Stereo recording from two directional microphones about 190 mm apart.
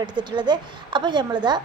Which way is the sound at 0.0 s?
25° right (ahead or behind).